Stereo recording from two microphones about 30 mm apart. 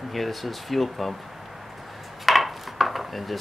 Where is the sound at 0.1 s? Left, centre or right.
Centre.